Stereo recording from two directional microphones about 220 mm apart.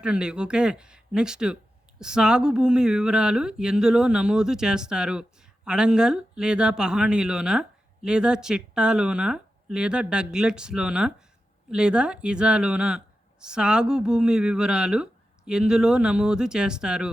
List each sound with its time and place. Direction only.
0.0 s speech: 5° right (ahead or behind)